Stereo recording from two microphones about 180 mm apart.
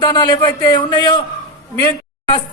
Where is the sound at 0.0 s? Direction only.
25° left (ahead or behind).